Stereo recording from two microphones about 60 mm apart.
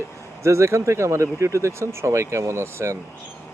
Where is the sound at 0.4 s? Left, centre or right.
Right.